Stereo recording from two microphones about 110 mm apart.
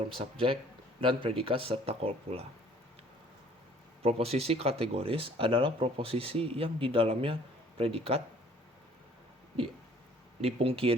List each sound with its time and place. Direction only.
0.1 s speech: 55° right (ahead or behind)
4.0 s speech: 65° right (ahead or behind)
10.4 s speech: 60° right (ahead or behind)